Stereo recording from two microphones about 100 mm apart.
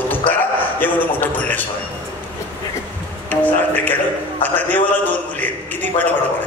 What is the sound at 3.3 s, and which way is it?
A man's voice, 15° left (ahead or behind).